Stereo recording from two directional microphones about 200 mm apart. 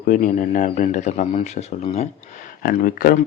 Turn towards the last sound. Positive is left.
turn(degrees=45)  # may be behind; listen again after turning